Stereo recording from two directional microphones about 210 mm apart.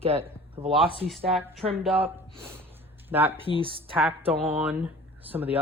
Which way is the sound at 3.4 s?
25° right (ahead or behind).